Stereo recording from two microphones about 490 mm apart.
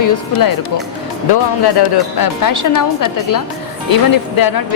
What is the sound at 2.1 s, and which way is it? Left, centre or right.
A woman's voice, left.